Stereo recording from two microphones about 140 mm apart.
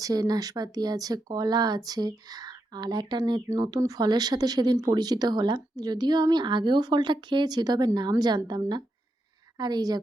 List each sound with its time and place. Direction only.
0.0 s speech: 25° right (ahead or behind)